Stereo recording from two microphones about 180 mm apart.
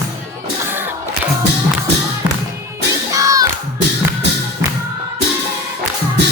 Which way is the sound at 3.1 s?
20° right (ahead or behind).